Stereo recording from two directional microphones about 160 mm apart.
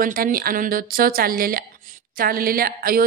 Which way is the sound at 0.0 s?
65° right (ahead or behind).